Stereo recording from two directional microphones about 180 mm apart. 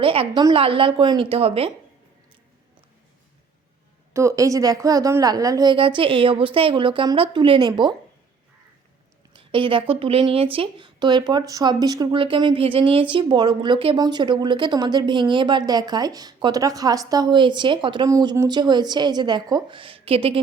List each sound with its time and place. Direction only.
0.0 s a woman's voice: 30° right (ahead or behind)
4.1 s speech: 15° right (ahead or behind)
9.3 s speech: 30° right (ahead or behind)